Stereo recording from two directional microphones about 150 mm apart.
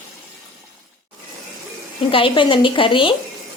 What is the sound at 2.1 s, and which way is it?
Speech, 35° left (ahead or behind).